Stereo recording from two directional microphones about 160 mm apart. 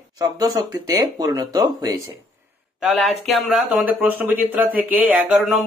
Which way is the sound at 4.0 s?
10° right (ahead or behind).